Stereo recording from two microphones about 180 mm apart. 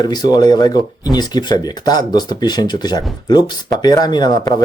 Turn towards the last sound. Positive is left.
turn(degrees=20)  # may be behind; listen again after turning